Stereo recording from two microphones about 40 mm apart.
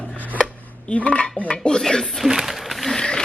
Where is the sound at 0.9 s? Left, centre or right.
Left.